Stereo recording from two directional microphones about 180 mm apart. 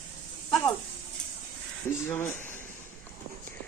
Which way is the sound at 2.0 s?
10° left (ahead or behind).